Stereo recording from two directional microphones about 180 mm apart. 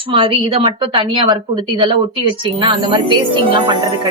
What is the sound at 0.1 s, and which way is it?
A woman's voice, 30° right (ahead or behind).